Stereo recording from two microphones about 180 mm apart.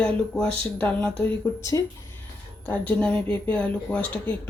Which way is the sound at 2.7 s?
10° left (ahead or behind).